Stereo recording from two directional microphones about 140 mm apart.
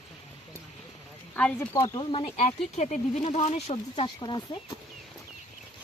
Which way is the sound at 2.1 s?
45° left (ahead or behind).